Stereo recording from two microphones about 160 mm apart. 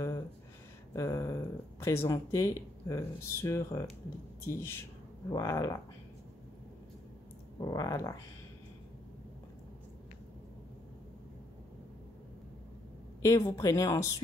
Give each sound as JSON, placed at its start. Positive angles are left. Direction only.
{"t": 0.9, "sound": "speech", "side_deg": 20}
{"t": 7.6, "sound": "speech", "side_deg": 20}
{"t": 13.2, "sound": "speech", "side_deg": 20}